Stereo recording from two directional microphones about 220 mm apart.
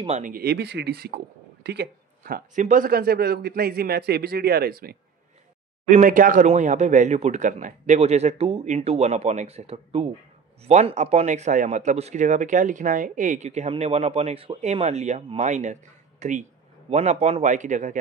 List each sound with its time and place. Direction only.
0.0 s speech: 35° right (ahead or behind)